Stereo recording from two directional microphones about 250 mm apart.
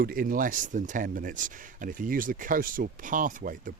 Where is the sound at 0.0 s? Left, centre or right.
Right.